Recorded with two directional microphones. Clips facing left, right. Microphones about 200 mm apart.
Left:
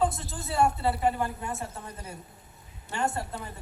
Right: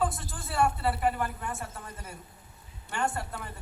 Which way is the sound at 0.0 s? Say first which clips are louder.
Left 3 dB; 20° left (ahead or behind).